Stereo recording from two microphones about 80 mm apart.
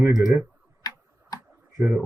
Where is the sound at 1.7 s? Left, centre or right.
Right.